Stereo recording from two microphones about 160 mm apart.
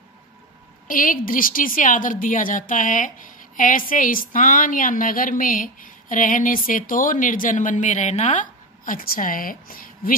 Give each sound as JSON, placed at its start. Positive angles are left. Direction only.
{"t": 0.8, "sound": "a woman's voice", "side_deg": 60}